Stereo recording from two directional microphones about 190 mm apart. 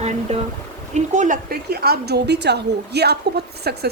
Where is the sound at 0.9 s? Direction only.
40° right (ahead or behind).